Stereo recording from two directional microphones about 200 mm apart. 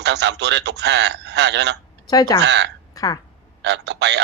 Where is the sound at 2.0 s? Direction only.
20° left (ahead or behind).